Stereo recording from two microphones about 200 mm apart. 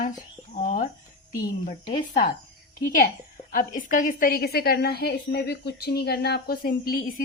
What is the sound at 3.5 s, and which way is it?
A woman's voice, 40° left (ahead or behind).